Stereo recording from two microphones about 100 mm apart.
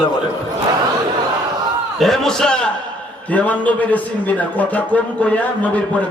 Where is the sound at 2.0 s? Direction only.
5° left (ahead or behind).